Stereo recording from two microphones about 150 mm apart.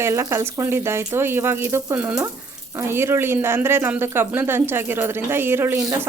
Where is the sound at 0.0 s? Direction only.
20° right (ahead or behind).